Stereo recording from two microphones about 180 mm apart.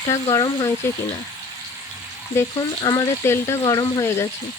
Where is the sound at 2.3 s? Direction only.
15° left (ahead or behind).